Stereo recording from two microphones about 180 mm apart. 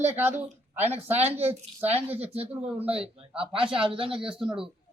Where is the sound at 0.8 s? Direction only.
10° right (ahead or behind).